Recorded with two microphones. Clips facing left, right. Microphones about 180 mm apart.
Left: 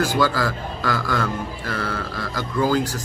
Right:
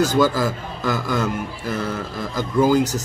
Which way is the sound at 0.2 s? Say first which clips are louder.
Right 3 dB; 20° right (ahead or behind).